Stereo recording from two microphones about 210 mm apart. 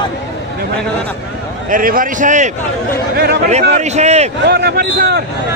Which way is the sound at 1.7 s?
40° right (ahead or behind).